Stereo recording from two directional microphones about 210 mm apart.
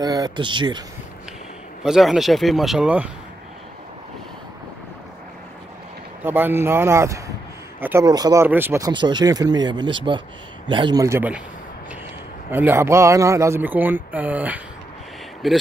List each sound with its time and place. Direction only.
0.0 s speech: 20° right (ahead or behind)
1.8 s a man's voice: centre (ahead or behind)
6.2 s speech: 10° right (ahead or behind)
12.4 s a man's voice: 10° right (ahead or behind)